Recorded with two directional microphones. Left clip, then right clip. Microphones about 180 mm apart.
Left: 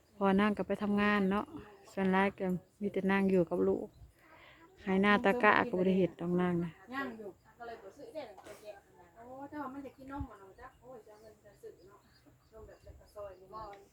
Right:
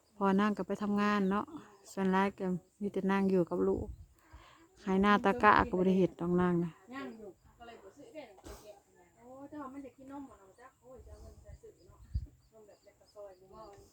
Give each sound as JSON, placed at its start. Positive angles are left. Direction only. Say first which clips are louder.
{"t": 0.2, "sound": "a woman's voice", "louder": "left 1 dB", "side_deg": -25}